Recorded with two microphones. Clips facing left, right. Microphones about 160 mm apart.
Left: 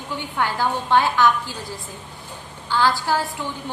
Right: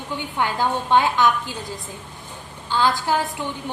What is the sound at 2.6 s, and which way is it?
Speech, 20° right (ahead or behind).